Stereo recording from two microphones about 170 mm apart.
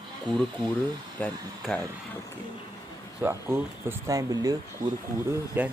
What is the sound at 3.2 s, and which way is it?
Speech, 15° right (ahead or behind).